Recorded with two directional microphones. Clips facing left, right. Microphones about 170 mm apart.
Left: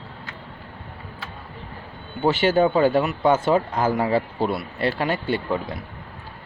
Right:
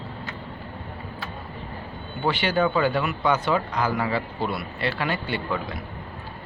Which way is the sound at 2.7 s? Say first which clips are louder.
Left 4 dB; 45° left (ahead or behind).